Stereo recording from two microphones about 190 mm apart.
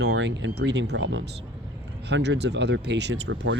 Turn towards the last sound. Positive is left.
turn(degrees=-70)  # may be behind; listen again after turning